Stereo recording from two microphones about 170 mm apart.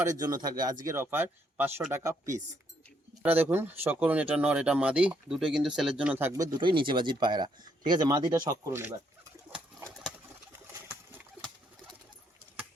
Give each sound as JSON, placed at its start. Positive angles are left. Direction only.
{"t": 0.0, "sound": "speech", "side_deg": -20}